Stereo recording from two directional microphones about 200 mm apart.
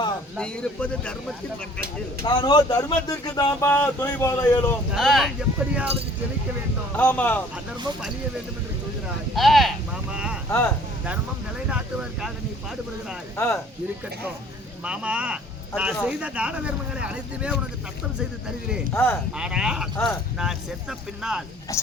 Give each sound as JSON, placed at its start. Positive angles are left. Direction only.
{"t": 0.3, "sound": "speech", "side_deg": 5}
{"t": 2.2, "sound": "a man's voice", "side_deg": 20}
{"t": 4.9, "sound": "speech", "side_deg": 0}
{"t": 6.9, "sound": "a man's voice", "side_deg": 5}
{"t": 9.3, "sound": "speech", "side_deg": 0}
{"t": 11.7, "sound": "speech", "side_deg": -5}
{"t": 13.3, "sound": "a man's voice", "side_deg": 15}
{"t": 14.8, "sound": "speech", "side_deg": -5}
{"t": 18.9, "sound": "a man's voice", "side_deg": 10}
{"t": 19.4, "sound": "speech", "side_deg": -5}